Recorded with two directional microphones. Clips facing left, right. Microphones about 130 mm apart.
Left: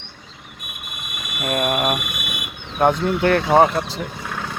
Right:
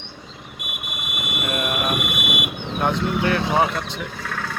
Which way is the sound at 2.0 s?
25° right (ahead or behind).